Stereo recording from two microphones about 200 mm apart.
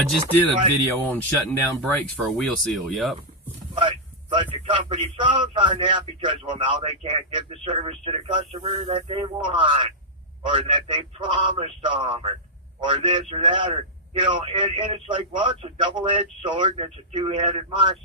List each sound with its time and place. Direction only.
0.1 s speech: 10° left (ahead or behind)
3.8 s a man's voice: 25° right (ahead or behind)